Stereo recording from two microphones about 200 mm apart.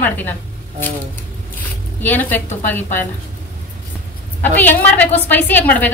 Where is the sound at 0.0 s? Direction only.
10° left (ahead or behind).